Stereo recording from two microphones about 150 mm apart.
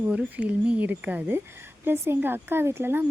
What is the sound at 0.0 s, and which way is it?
Speech, 10° right (ahead or behind).